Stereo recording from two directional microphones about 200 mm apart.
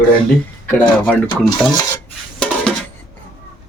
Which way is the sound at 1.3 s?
20° left (ahead or behind).